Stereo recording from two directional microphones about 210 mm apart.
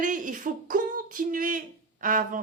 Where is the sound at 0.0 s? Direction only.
40° right (ahead or behind).